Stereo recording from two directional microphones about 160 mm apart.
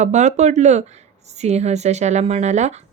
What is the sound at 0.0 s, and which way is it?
Speech, 45° right (ahead or behind).